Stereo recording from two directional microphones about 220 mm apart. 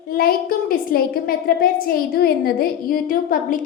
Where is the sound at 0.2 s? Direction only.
40° left (ahead or behind).